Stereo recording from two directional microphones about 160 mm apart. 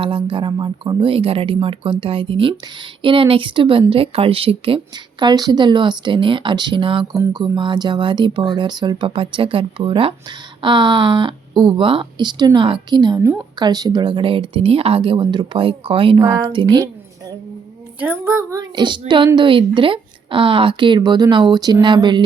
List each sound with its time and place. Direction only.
0.0 s speech: 30° right (ahead or behind)
18.0 s speech: 15° right (ahead or behind); by 22.2 s 30° right (ahead or behind)